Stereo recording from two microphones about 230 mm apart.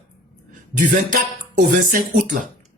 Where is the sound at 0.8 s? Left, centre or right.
Right.